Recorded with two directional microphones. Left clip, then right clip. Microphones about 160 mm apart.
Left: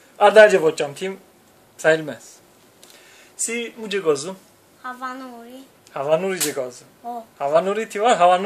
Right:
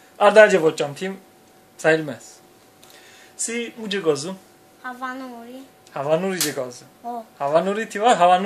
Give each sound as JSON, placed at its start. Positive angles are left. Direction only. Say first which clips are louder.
{"t": 0.2, "sound": "speech", "louder": "left 1 dB", "side_deg": 25}
{"t": 3.3, "sound": "speech", "louder": "left 1 dB", "side_deg": 25}
{"t": 4.8, "sound": "a woman's voice", "louder": "even", "side_deg": 5}
{"t": 5.9, "sound": "speech", "louder": "left 1 dB", "side_deg": 25}